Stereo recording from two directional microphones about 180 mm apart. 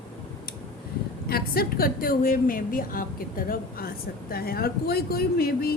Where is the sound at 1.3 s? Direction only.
60° left (ahead or behind).